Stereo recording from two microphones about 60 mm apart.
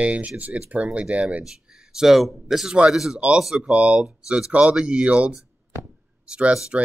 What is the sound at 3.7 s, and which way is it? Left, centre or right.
Speech, centre.